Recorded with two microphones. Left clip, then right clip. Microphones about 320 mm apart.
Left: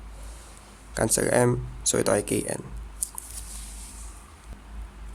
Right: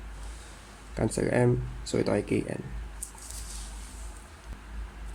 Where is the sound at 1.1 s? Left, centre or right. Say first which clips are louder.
Left 3 dB; left.